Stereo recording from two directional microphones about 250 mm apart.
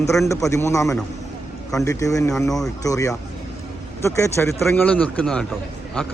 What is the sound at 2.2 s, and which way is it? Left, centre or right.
Speech, centre.